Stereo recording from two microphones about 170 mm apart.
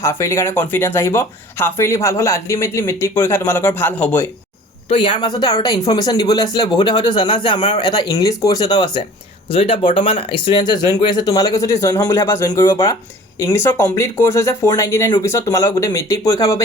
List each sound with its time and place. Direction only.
0.0 s speech: 15° left (ahead or behind)
4.9 s speech: 30° left (ahead or behind)